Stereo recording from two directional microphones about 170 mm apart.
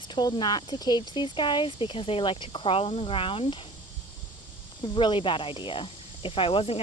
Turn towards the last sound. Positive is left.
turn(degrees=35)  # may be behind; listen again after turning